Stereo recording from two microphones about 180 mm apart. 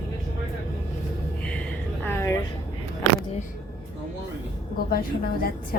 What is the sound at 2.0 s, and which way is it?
Speech, 15° left (ahead or behind).